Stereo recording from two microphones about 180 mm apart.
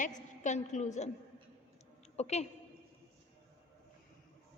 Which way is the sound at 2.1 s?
35° left (ahead or behind).